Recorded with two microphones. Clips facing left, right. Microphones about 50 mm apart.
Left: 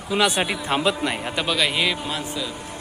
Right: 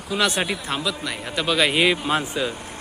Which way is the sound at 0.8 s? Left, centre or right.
Left.